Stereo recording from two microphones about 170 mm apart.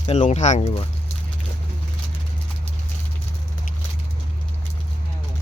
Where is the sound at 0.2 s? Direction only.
45° left (ahead or behind).